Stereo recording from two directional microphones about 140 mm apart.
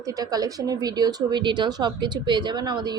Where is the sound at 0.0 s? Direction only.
25° right (ahead or behind).